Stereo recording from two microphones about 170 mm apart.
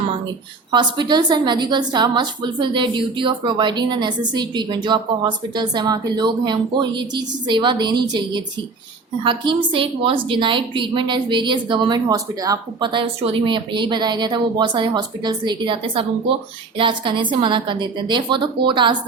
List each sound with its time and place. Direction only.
0.7 s a woman's voice: 25° right (ahead or behind)